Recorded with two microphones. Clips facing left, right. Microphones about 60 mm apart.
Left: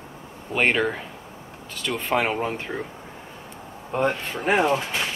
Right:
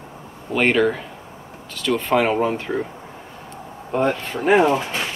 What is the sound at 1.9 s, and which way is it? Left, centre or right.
Speech, centre.